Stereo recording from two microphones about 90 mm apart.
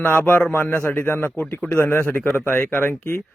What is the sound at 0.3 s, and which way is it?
A man's voice, 20° left (ahead or behind).